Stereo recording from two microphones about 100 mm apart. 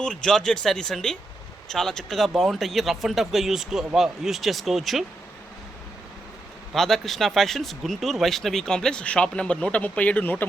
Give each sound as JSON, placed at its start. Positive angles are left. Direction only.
{"t": 0.0, "sound": "speech", "side_deg": 5}
{"t": 6.7, "sound": "speech", "side_deg": 5}